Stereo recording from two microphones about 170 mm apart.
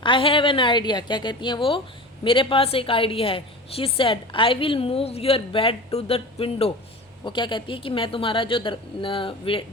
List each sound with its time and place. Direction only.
0.0 s a woman's voice: 30° left (ahead or behind)